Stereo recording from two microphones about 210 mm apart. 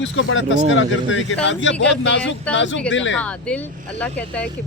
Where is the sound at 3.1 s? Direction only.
5° left (ahead or behind).